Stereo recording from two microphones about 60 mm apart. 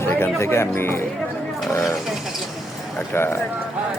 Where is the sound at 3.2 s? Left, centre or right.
Left.